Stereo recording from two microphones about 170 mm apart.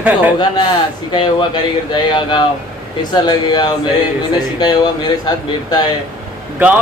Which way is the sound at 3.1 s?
25° left (ahead or behind).